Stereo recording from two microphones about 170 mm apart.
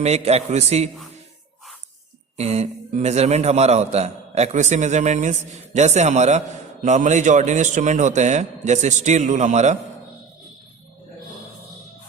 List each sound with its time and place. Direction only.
0.0 s a man's voice: 40° right (ahead or behind)
2.4 s a man's voice: 40° right (ahead or behind)